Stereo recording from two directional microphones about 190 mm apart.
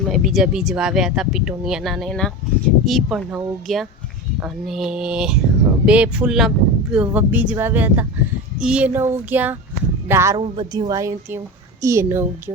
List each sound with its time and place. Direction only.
0.1 s speech: centre (ahead or behind)